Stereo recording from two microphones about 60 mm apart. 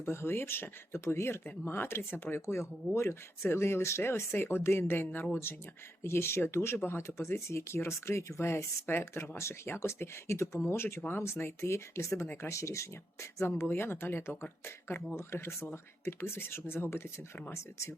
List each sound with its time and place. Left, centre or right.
0.0 s speech: left